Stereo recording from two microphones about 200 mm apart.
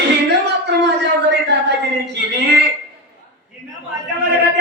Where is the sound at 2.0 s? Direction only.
60° right (ahead or behind).